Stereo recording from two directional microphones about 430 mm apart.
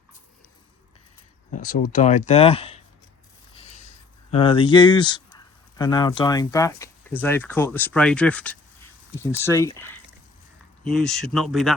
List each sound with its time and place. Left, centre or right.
1.5 s speech: centre